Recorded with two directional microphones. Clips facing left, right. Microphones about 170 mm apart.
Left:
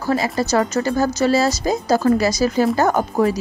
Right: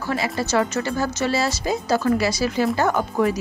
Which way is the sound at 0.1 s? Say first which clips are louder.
Left 4 dB; 40° left (ahead or behind).